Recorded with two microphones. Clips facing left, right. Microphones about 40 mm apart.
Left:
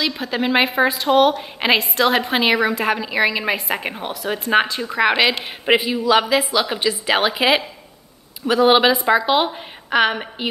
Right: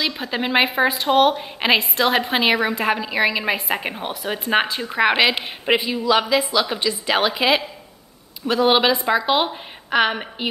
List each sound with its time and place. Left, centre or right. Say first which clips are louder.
0.3 s speech: left 1 dB; centre
1.4 s a woman's voice: left 1 dB; centre